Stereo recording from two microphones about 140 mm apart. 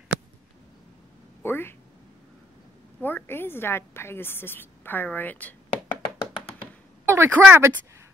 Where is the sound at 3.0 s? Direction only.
15° left (ahead or behind).